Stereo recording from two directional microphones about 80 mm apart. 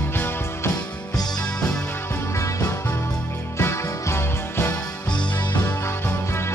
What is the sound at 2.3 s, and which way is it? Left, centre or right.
Music, left.